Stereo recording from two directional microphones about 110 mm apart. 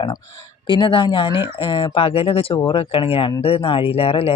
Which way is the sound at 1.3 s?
20° right (ahead or behind).